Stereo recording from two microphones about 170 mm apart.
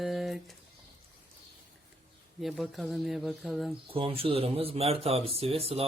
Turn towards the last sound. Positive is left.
turn(degrees=-35)  # may be behind; listen again after turning